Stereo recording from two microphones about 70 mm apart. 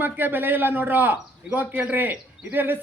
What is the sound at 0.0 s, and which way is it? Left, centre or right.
A man's voice, right.